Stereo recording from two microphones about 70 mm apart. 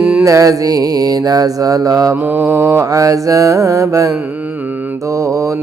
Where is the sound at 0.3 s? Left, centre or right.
Right.